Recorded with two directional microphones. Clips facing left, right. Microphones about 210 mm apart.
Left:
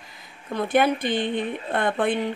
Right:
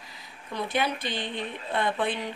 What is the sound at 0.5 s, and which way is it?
Speech, 50° left (ahead or behind).